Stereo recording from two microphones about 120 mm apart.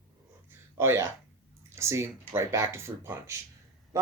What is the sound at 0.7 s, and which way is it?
Speech, 20° right (ahead or behind).